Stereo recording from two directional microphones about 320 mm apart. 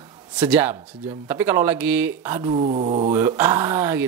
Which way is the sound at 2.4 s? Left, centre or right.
Right.